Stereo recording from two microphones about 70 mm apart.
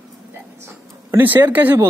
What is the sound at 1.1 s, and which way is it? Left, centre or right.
Speech, right.